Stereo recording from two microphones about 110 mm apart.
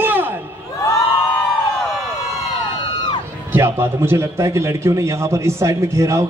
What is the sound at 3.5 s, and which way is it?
A man's voice, 25° right (ahead or behind).